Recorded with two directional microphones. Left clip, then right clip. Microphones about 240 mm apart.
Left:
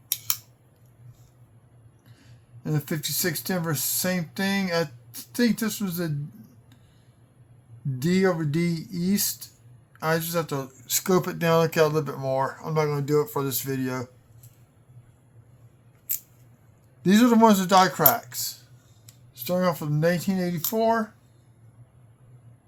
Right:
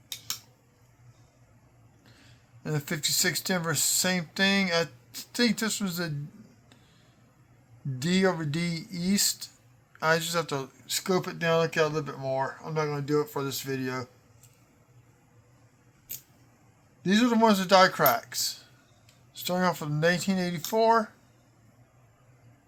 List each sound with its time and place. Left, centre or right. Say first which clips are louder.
2.6 s speech: even; right
7.9 s speech: left 3 dB; right
10.8 s speech: left 5 dB; centre
17.0 s speech: left 5 dB; centre; by 21.1 s right